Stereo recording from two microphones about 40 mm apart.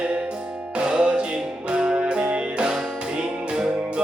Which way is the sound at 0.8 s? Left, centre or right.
Right.